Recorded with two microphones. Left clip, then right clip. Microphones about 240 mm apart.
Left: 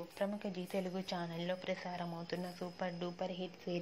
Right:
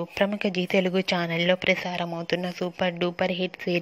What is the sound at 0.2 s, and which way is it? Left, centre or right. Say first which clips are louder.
Speech: right 15 dB; right.